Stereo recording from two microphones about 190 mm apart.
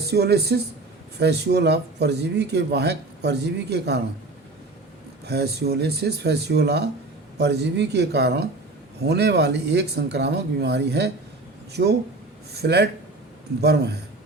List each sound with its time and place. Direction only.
0.1 s speech: 60° right (ahead or behind)
5.2 s speech: 60° right (ahead or behind)